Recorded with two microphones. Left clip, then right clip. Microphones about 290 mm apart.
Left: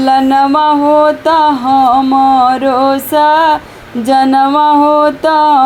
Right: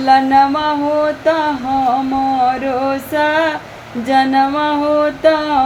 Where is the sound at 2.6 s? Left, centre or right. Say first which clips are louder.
Left 7 dB; left.